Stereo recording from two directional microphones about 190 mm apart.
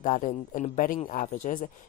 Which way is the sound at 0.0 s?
45° left (ahead or behind).